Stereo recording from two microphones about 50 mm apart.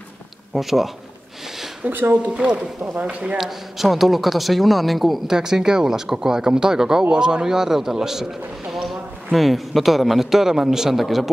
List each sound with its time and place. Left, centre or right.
0.6 s a man's voice: centre
1.9 s speech: right
2.3 s speech: centre
2.8 s speech: right
3.3 s a man's voice: centre
5.3 s speech: centre